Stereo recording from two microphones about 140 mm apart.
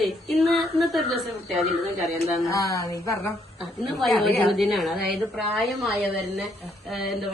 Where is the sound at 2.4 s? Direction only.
25° left (ahead or behind).